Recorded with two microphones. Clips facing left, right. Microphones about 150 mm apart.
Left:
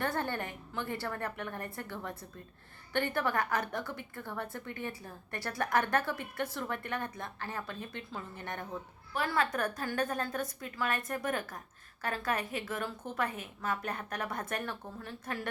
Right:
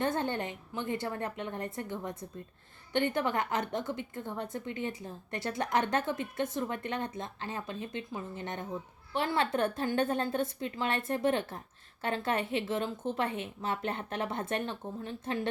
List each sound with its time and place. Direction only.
0.0 s a woman's voice: 20° right (ahead or behind)